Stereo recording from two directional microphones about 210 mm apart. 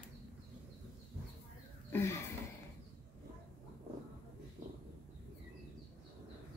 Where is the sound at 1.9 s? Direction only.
10° left (ahead or behind).